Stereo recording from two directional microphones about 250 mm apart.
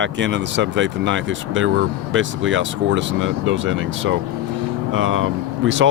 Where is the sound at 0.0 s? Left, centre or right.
Right.